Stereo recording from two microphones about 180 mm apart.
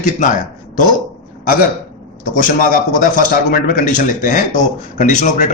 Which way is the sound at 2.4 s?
50° left (ahead or behind).